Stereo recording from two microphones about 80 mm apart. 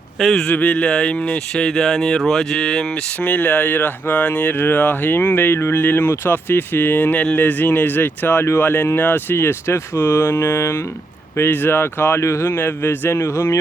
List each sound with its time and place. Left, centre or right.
0.2 s a man's voice: centre
0.4 s speech: centre
3.2 s speech: left